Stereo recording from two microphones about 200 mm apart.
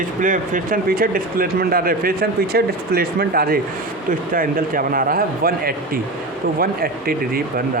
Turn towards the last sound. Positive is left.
turn(degrees=-50)  # may be behind; listen again after turning